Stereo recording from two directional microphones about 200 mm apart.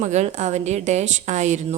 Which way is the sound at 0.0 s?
35° right (ahead or behind).